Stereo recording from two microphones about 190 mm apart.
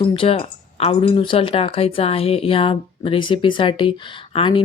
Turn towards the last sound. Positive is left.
turn(degrees=25)  # may be behind; listen again after turning